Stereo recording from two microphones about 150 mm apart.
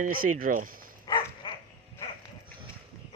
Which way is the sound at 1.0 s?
30° left (ahead or behind).